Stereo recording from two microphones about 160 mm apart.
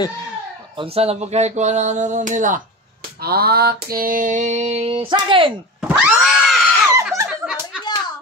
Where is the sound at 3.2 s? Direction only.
75° right (ahead or behind); by 5.0 s 40° right (ahead or behind).